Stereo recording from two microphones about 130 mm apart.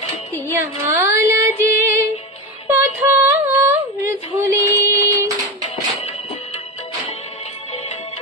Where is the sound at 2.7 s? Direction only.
20° right (ahead or behind).